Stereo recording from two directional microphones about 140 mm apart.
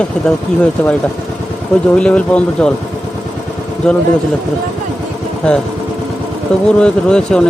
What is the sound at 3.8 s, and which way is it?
Speech, 5° left (ahead or behind).